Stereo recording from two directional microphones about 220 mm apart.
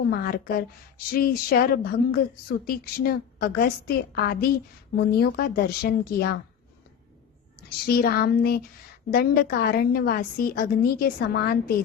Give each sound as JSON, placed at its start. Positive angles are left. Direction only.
{"t": 0.0, "sound": "a woman's voice", "side_deg": 45}
{"t": 7.9, "sound": "a woman's voice", "side_deg": 45}